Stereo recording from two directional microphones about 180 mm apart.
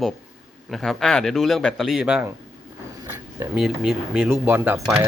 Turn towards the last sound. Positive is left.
turn(degrees=-10)  # may be behind; listen again after turning